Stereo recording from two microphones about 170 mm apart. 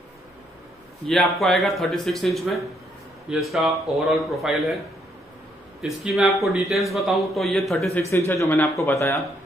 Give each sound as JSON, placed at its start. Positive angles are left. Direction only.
{"t": 1.0, "sound": "speech", "side_deg": 0}
{"t": 5.8, "sound": "speech", "side_deg": 0}
{"t": 8.3, "sound": "speech", "side_deg": 10}